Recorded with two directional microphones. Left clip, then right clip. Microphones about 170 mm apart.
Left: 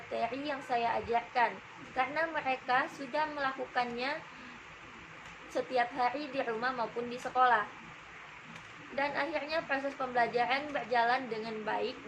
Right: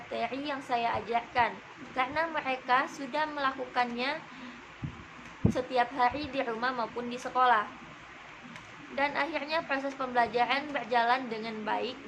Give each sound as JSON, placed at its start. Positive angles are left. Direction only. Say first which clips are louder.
{"t": 0.1, "sound": "a woman's voice", "louder": "right 1 dB", "side_deg": -15}
{"t": 5.5, "sound": "a woman's voice", "louder": "right 2 dB", "side_deg": -15}
{"t": 9.0, "sound": "a woman's voice", "louder": "right 3 dB", "side_deg": -15}